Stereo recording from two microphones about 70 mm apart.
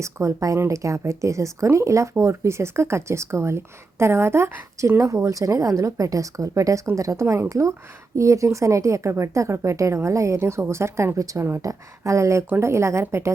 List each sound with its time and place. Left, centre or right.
0.0 s speech: right